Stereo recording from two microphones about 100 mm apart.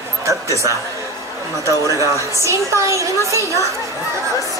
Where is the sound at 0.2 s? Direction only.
30° right (ahead or behind).